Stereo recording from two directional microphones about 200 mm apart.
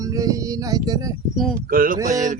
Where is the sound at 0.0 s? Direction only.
15° right (ahead or behind).